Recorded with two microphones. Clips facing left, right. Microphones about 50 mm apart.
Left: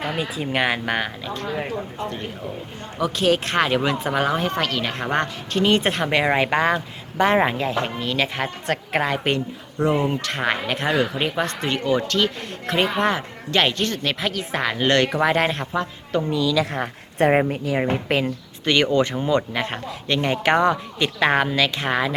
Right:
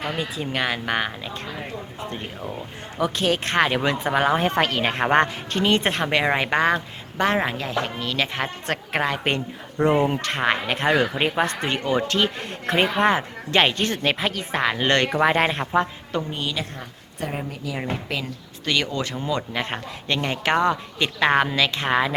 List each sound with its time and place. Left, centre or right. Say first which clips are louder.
0.0 s speech: left 2 dB; centre
0.9 s speech: even; centre
1.2 s speech: left 3 dB; centre
3.2 s speech: left 2 dB; centre
4.1 s speech: right 3 dB; centre
4.4 s speech: right 2 dB; right
5.5 s speech: left 2 dB; centre
12.0 s speech: left 1 dB; centre
14.2 s speech: even; centre
16.7 s a woman's voice: left 12 dB; left
17.7 s speech: left 7 dB; left
19.5 s speech: left 2 dB; centre